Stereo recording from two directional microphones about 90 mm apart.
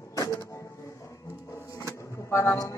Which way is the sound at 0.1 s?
40° left (ahead or behind).